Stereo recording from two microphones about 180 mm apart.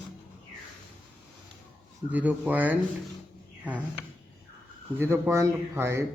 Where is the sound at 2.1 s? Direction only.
10° right (ahead or behind).